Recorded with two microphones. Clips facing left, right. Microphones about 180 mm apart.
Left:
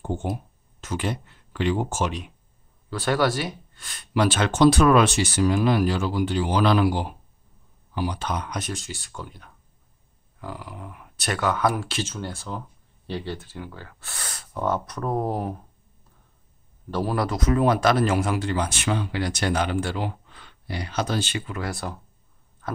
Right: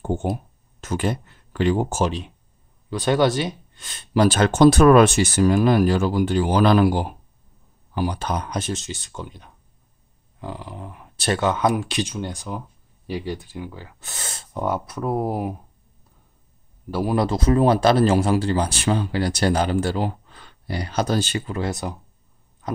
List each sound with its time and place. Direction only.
0.0 s speech: 45° right (ahead or behind)
2.9 s speech: 20° right (ahead or behind)
4.1 s speech: 40° right (ahead or behind); by 14.6 s 25° right (ahead or behind)
14.6 s speech: 10° right (ahead or behind)
16.9 s speech: 15° right (ahead or behind); by 21.5 s 40° right (ahead or behind)
21.5 s speech: 20° right (ahead or behind)